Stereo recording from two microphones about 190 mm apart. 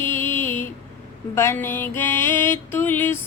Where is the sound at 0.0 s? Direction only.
10° left (ahead or behind).